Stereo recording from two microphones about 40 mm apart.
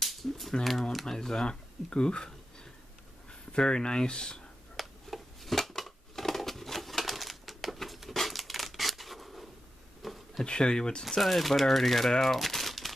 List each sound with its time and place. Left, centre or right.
0.0 s typewriter: centre
1.0 s speech: centre
4.7 s a sound: centre
10.4 s speech: left
11.1 s speech: centre
12.1 s crumpling: centre